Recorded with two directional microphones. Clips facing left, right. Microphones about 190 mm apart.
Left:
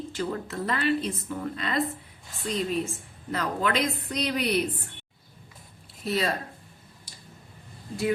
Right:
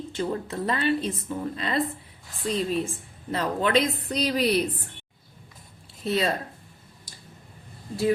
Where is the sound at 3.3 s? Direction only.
30° right (ahead or behind).